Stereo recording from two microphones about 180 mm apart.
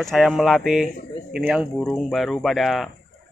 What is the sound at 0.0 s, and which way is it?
Speech, centre (ahead or behind).